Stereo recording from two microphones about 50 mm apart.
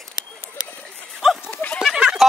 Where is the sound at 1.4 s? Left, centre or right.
Left.